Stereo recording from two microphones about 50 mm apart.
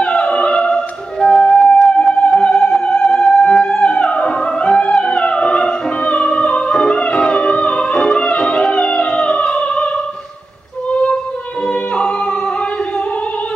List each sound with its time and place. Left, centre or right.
0.0 s opera: left
1.7 s music: centre